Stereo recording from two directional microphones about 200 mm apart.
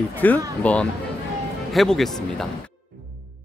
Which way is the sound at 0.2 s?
10° left (ahead or behind).